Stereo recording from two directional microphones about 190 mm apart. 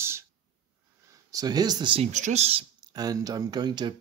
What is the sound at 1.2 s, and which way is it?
Speech, 20° right (ahead or behind).